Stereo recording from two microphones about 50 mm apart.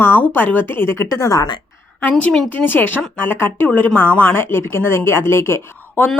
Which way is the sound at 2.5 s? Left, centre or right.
Left.